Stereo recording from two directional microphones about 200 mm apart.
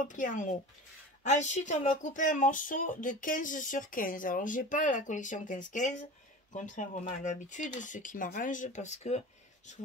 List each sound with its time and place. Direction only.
0.0 s speech: 40° left (ahead or behind)